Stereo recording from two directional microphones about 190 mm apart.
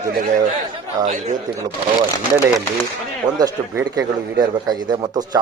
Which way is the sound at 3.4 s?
20° right (ahead or behind).